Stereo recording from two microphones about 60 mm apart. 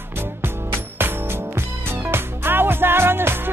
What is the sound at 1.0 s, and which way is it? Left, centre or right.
Music, right.